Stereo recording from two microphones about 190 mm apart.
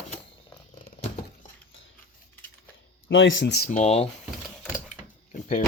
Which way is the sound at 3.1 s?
80° left.